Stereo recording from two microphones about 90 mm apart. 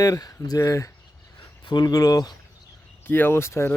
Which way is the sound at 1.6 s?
50° left (ahead or behind).